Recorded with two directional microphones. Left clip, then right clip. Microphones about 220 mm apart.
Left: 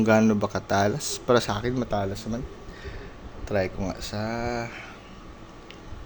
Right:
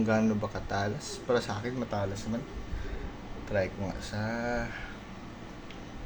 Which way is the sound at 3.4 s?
45° left (ahead or behind).